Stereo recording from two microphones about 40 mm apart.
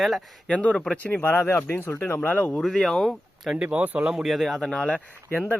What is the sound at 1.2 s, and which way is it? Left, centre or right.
Speech, left.